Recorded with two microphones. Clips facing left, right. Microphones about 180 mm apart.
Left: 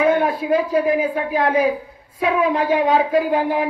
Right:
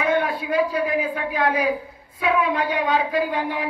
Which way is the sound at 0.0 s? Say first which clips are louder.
Left 5 dB; 40° left (ahead or behind).